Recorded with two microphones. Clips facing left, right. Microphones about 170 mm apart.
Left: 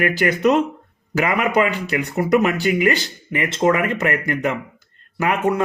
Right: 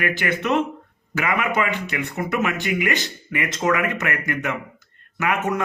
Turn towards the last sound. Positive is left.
turn(degrees=30)  # may be behind; listen again after turning